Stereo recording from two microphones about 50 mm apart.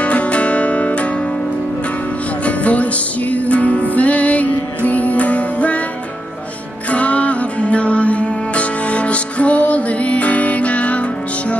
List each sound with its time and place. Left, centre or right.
0.0 s music: left
2.4 s music: left
6.9 s music: left